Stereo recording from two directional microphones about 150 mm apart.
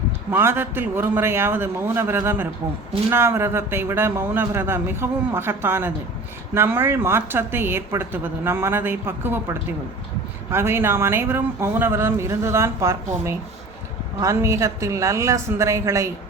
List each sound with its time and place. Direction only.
0.3 s a woman's voice: 15° right (ahead or behind)